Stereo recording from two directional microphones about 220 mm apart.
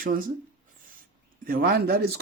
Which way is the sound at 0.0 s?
40° right (ahead or behind).